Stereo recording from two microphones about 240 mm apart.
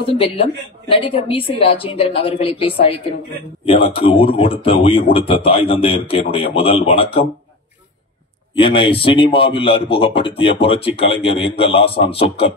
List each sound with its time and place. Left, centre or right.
0.0 s a man's voice: left
8.5 s a man's voice: left